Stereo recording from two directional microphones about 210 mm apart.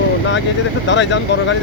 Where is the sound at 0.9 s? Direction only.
60° left (ahead or behind).